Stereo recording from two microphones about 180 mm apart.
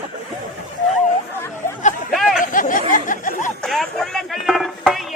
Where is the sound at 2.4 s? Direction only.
45° left (ahead or behind).